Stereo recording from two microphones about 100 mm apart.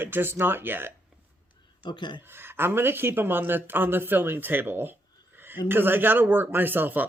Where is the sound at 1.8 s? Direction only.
50° left (ahead or behind).